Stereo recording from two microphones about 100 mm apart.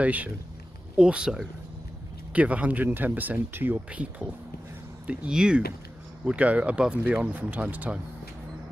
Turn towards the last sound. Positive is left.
turn(degrees=-15)  # may be behind; listen again after turning